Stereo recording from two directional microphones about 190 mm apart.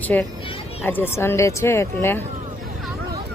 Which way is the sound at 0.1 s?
10° left (ahead or behind).